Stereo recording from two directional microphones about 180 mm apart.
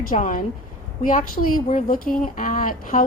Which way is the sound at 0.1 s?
50° left (ahead or behind).